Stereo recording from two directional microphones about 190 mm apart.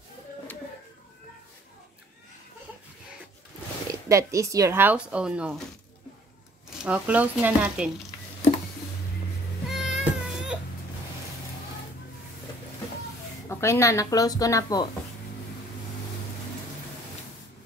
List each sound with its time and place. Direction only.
4.1 s speech: 15° right (ahead or behind)
6.8 s speech: 5° right (ahead or behind)
9.7 s a sound: centre (ahead or behind)
13.5 s speech: 15° left (ahead or behind)